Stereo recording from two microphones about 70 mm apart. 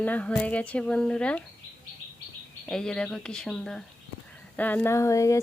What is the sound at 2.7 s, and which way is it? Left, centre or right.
Speech, centre.